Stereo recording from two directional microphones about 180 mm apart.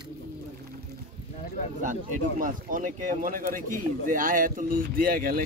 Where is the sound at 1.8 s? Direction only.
45° right (ahead or behind).